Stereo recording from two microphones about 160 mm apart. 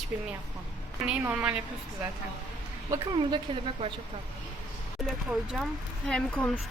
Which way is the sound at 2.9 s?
30° right (ahead or behind).